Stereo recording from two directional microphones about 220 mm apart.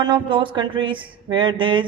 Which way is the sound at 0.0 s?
20° right (ahead or behind).